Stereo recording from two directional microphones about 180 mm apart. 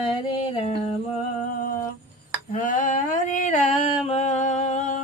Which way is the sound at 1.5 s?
50° left (ahead or behind).